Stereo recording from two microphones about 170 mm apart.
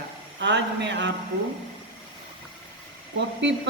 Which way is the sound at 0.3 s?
90° right.